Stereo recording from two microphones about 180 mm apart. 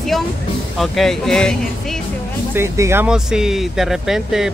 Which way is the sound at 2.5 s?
15° right (ahead or behind).